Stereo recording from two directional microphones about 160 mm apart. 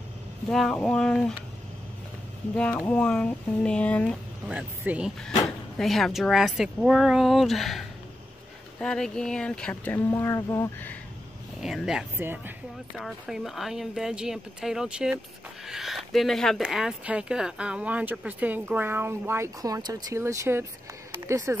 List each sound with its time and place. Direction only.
0.5 s speech: 5° left (ahead or behind)
2.5 s speech: 5° left (ahead or behind)
4.5 s speech: 10° right (ahead or behind); by 11.0 s 15° left (ahead or behind)
11.6 s speech: 5° right (ahead or behind)
12.9 s speech: centre (ahead or behind); by 21.5 s 20° right (ahead or behind)